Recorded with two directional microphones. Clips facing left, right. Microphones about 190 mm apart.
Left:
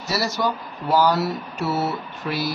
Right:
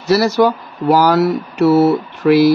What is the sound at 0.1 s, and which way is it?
Speech, 80° right.